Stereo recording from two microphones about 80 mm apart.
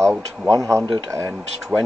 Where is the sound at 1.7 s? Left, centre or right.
Centre.